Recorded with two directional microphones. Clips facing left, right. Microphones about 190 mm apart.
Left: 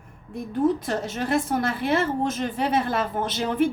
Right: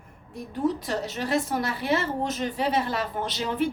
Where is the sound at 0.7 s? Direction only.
50° left (ahead or behind).